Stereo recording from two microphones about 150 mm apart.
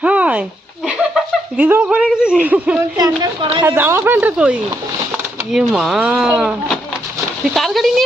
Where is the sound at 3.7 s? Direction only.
15° right (ahead or behind).